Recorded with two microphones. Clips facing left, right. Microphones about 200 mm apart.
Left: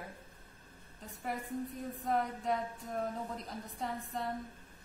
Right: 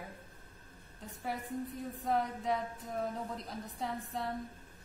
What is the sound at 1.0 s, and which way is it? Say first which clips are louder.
A woman's voice: even; centre (ahead or behind).